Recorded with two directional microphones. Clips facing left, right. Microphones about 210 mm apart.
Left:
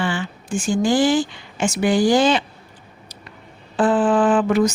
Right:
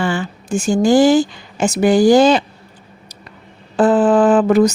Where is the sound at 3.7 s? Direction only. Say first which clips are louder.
Right 5 dB; 40° right (ahead or behind).